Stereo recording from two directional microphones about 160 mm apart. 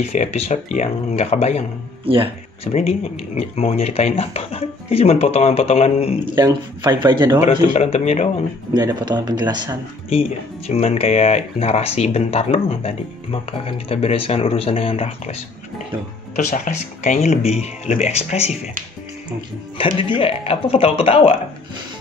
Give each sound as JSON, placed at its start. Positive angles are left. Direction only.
{"t": 0.0, "sound": "speech", "side_deg": 45}
{"t": 2.0, "sound": "speech", "side_deg": -35}
{"t": 2.6, "sound": "speech", "side_deg": 40}
{"t": 6.3, "sound": "speech", "side_deg": -25}
{"t": 7.7, "sound": "speech", "side_deg": 45}
{"t": 8.7, "sound": "speech", "side_deg": -25}
{"t": 10.7, "sound": "speech", "side_deg": 40}
{"t": 16.3, "sound": "speech", "side_deg": 50}
{"t": 19.8, "sound": "speech", "side_deg": 35}